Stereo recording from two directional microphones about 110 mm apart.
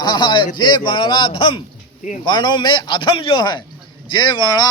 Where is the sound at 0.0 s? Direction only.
40° left (ahead or behind).